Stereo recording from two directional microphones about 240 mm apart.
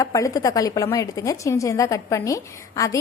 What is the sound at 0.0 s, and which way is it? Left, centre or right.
A woman's voice, centre.